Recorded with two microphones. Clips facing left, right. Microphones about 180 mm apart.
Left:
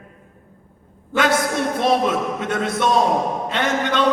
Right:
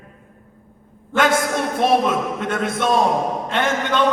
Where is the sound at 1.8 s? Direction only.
50° right (ahead or behind).